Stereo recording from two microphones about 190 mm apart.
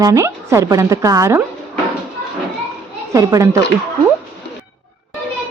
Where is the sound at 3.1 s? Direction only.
15° right (ahead or behind).